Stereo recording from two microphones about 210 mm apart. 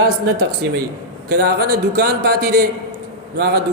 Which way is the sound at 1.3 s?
50° right (ahead or behind).